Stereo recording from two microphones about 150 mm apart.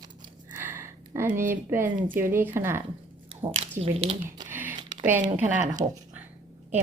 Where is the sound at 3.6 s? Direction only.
40° right (ahead or behind).